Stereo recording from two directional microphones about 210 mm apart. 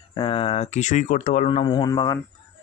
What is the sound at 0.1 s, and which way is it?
Speech, 25° left (ahead or behind).